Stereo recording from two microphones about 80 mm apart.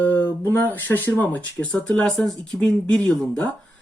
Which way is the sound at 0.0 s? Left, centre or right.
Left.